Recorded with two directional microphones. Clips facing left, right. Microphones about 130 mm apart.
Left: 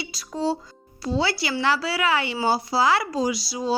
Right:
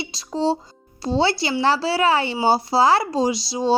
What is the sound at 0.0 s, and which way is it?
Speech, 25° right (ahead or behind).